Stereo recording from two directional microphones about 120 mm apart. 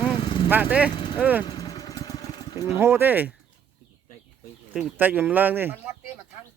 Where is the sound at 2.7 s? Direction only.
20° right (ahead or behind).